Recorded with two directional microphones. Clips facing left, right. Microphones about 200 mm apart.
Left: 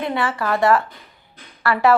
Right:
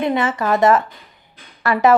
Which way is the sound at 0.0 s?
20° right (ahead or behind).